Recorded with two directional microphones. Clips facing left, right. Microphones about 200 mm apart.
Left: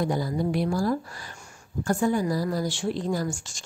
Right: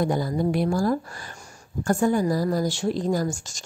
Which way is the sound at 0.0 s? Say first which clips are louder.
Right 3 dB; 50° right (ahead or behind).